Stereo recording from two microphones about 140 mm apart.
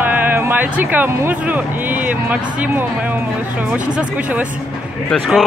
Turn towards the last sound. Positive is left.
turn(degrees=0)  # may be behind; listen again after turning